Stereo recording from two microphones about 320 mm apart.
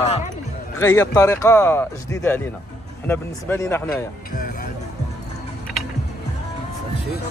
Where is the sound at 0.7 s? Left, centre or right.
Centre.